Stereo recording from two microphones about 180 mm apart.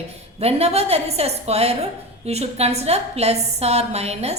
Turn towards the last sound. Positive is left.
turn(degrees=-35)  # may be behind; listen again after turning